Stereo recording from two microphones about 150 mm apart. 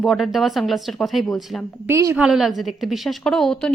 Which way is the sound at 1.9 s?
20° right (ahead or behind).